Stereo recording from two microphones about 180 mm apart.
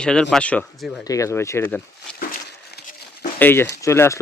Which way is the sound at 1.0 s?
20° left (ahead or behind).